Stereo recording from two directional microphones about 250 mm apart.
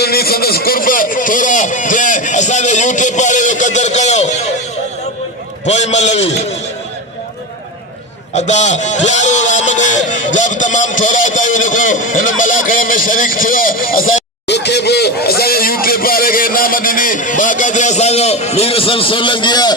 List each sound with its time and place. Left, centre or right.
0.0 s a sound: left
5.6 s a man's voice: left
8.4 s speech: left